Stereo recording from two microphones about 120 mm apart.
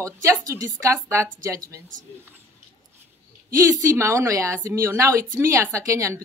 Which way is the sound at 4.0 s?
25° right (ahead or behind).